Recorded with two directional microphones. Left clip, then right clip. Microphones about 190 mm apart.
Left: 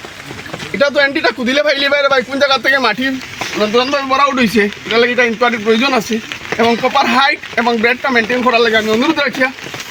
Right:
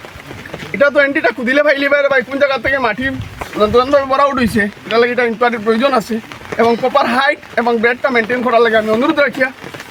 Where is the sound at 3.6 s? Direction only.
15° right (ahead or behind).